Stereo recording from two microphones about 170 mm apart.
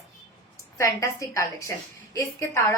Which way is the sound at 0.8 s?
20° left (ahead or behind).